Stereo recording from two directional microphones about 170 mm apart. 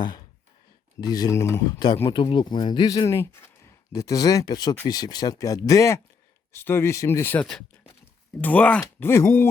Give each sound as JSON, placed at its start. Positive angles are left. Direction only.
{"t": 1.0, "sound": "speech", "side_deg": 25}